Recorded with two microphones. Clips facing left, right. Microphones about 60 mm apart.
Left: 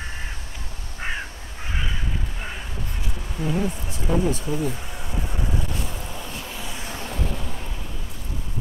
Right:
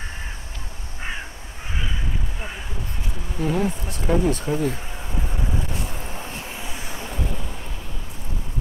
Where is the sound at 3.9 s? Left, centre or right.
Right.